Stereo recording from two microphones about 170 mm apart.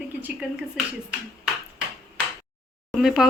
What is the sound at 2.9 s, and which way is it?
Speech, centre (ahead or behind).